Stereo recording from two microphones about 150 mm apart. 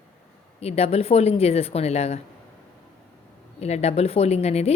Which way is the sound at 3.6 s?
45° left (ahead or behind).